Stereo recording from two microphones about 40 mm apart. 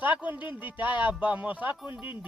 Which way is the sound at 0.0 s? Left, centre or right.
Right.